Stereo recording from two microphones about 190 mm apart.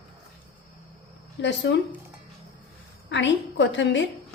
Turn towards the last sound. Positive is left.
turn(degrees=75)  # may be behind; listen again after turning